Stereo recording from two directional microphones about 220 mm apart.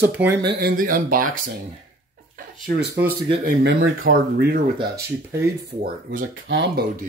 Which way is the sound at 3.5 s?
45° right (ahead or behind).